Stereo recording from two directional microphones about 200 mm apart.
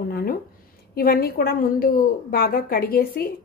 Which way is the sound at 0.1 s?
50° left (ahead or behind).